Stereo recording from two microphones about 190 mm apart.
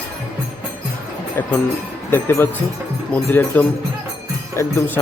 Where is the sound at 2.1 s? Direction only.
10° left (ahead or behind).